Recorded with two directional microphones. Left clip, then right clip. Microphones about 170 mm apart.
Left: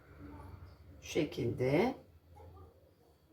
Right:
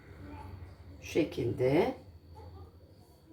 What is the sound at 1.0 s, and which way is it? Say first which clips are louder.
Speech: right 4 dB; 25° right (ahead or behind).